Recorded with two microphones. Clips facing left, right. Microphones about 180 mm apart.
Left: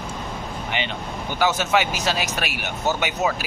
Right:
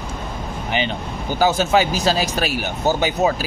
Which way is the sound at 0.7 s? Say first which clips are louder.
Right 6 dB; 30° right (ahead or behind).